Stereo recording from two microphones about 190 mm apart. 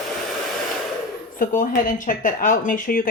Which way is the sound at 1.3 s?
45° left (ahead or behind).